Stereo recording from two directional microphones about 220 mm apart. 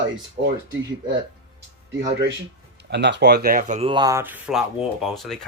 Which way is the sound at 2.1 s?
50° right (ahead or behind).